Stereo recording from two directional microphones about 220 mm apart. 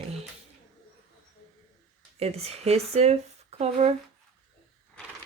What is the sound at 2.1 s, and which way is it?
Speech, 30° right (ahead or behind).